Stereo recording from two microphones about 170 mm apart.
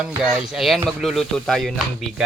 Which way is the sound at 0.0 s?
5° right (ahead or behind).